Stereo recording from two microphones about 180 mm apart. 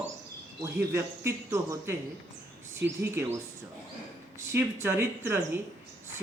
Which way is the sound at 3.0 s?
15° right (ahead or behind).